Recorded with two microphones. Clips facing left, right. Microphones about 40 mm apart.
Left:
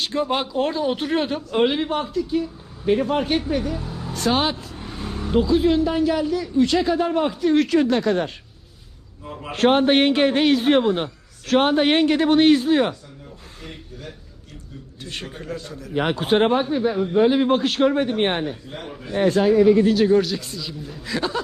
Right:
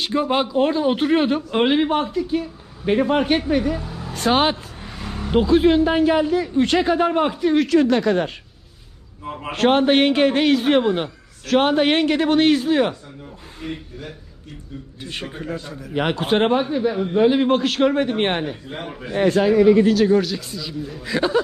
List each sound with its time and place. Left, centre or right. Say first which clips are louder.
0.0 s speech: right 3 dB; centre
3.6 s a man's voice: right 3 dB; right
7.4 s a man's voice: even; centre
7.8 s a man's voice: right 2 dB; right
9.2 s speech: right 4 dB; right
9.6 s a man's voice: right 1 dB; right
11.4 s a man's voice: right 1 dB; right
13.6 s a man's voice: right 8 dB; centre
16.0 s a man's voice: even; right
18.1 s a man's voice: right 1 dB; right
18.7 s speech: right 3 dB; right
19.4 s speech: right 1 dB; right
20.1 s a man's voice: even; centre
21.0 s a man's voice: right 5 dB; centre